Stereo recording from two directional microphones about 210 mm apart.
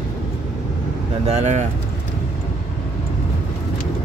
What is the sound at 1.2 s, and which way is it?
Speech, 30° right (ahead or behind).